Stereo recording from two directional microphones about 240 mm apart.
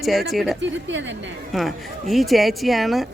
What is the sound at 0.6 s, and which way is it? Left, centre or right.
Speech, right.